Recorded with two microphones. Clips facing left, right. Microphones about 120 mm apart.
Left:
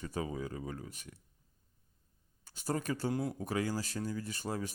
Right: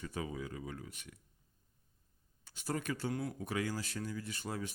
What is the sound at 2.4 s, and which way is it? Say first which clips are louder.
Speech: left 3 dB; 40° left (ahead or behind).